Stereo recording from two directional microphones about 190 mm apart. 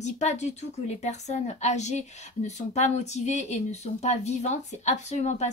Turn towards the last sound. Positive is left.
turn(degrees=35)  # may be behind; listen again after turning